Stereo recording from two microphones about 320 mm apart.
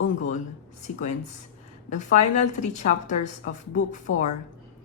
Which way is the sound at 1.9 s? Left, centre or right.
Left.